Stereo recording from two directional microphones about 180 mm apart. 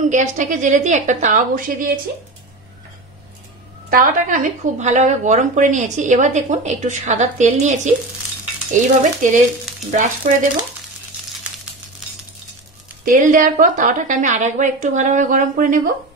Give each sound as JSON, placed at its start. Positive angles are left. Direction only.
{"t": 0.1, "sound": "a woman's voice", "side_deg": -45}
{"t": 3.9, "sound": "a woman's voice", "side_deg": -45}
{"t": 13.0, "sound": "a woman's voice", "side_deg": -45}